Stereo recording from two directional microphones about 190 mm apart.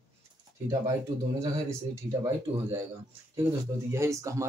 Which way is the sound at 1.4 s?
15° right (ahead or behind).